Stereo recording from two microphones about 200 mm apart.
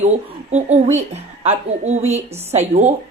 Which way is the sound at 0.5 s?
35° right (ahead or behind).